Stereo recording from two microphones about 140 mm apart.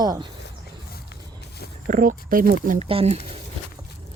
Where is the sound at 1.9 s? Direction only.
75° right (ahead or behind).